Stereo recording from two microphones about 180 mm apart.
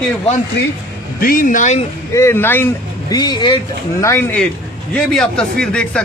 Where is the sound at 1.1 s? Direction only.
50° left (ahead or behind).